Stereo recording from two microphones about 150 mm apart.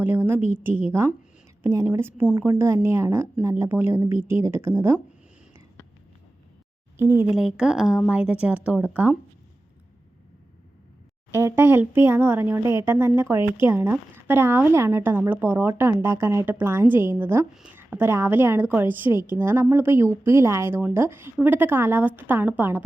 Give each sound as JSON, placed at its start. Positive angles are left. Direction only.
{"t": 0.0, "sound": "a sound", "side_deg": -15}
{"t": 0.6, "sound": "speech", "side_deg": -15}
{"t": 6.9, "sound": "speech", "side_deg": -15}
{"t": 7.3, "sound": "speech", "side_deg": -5}
{"t": 11.3, "sound": "speech", "side_deg": -20}